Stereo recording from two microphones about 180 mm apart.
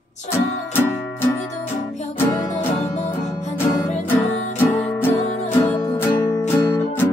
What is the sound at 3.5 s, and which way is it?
Music, 10° left (ahead or behind).